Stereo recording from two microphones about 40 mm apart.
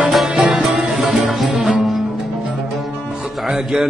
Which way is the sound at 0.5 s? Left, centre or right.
Centre.